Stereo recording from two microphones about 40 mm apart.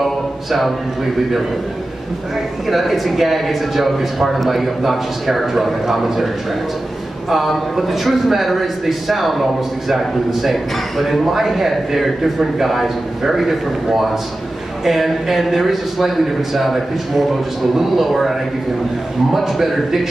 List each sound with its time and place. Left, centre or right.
0.0 s a sound: centre
2.7 s a man's voice: centre
19.3 s a man's voice: centre